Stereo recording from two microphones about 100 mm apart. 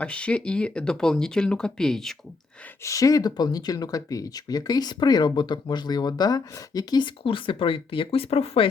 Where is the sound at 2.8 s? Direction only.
35° left (ahead or behind).